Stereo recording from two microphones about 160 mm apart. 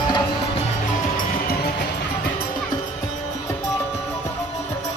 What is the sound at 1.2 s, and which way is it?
Music, 70° left (ahead or behind).